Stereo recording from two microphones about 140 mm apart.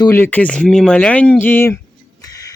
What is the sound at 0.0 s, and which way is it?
Speech, 15° left (ahead or behind).